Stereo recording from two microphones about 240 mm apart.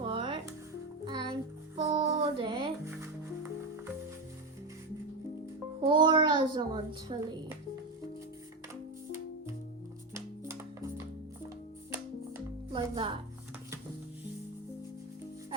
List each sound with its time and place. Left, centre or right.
0.0 s music: centre
5.8 s a sound: centre
7.1 s speech: right
10.2 s music: centre
12.7 s music: right